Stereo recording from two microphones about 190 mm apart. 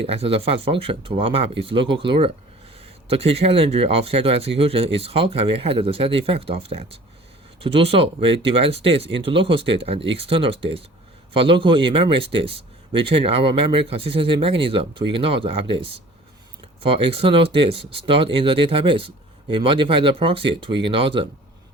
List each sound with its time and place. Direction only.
0.1 s speech: 30° right (ahead or behind)